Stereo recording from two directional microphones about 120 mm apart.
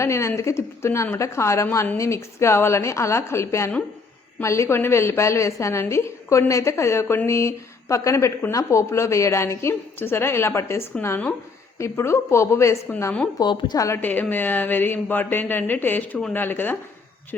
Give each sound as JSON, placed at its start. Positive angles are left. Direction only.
{"t": 0.0, "sound": "a woman's voice", "side_deg": 25}
{"t": 13.4, "sound": "a woman's voice", "side_deg": 40}
{"t": 14.0, "sound": "speech", "side_deg": 15}